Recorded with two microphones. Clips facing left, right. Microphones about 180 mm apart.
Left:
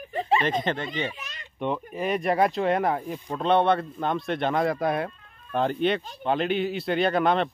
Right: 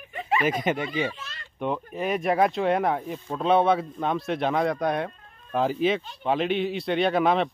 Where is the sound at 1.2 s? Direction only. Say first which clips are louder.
Even; 15° left (ahead or behind).